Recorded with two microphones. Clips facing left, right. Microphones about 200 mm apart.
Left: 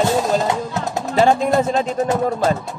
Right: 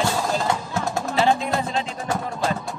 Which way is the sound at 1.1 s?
45° left (ahead or behind).